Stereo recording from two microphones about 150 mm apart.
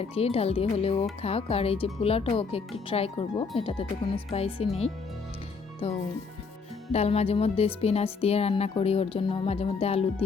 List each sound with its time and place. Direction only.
0.0 s speech: 40° left (ahead or behind)